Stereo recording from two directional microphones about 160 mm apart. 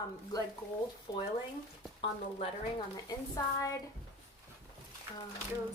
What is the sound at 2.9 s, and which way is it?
Speech, 20° left (ahead or behind).